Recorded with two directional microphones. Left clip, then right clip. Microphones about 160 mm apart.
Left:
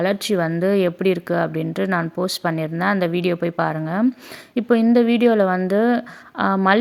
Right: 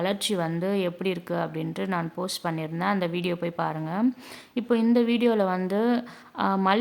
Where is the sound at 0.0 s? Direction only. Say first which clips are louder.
Left 7 dB; 25° left (ahead or behind).